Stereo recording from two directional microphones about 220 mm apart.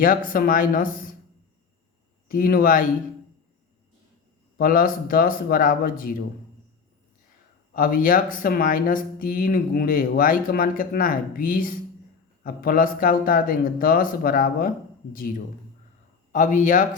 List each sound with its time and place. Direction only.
0.3 s speech: 40° left (ahead or behind)
2.2 s speech: 40° left (ahead or behind)
4.5 s speech: 40° left (ahead or behind)
7.7 s speech: 40° left (ahead or behind)